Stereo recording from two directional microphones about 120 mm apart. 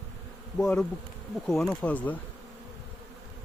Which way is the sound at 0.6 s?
5° left (ahead or behind).